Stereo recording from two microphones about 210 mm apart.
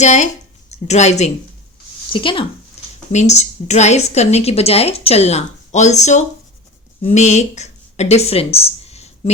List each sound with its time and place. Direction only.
0.0 s a woman's voice: 35° left (ahead or behind)